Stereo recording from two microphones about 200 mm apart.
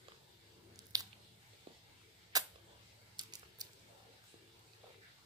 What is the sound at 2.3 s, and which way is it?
Camera, 20° right (ahead or behind).